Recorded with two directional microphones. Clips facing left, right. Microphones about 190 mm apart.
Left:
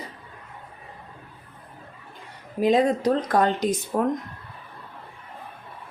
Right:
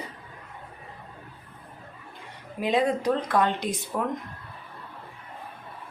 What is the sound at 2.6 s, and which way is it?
Speech, 40° left (ahead or behind).